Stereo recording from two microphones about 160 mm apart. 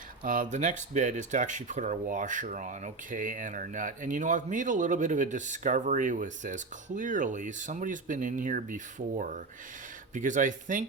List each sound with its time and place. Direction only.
0.2 s speech: 50° right (ahead or behind)